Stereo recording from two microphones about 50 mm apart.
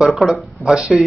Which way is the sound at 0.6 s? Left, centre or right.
Centre.